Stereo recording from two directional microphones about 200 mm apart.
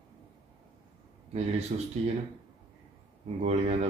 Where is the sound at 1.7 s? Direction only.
40° right (ahead or behind).